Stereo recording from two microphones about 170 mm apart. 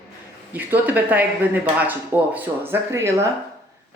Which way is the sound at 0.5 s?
10° right (ahead or behind).